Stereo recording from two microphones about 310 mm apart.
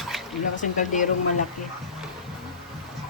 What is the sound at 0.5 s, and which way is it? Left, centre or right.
Speech, left.